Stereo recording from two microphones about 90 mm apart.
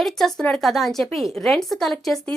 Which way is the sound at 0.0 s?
5° left (ahead or behind).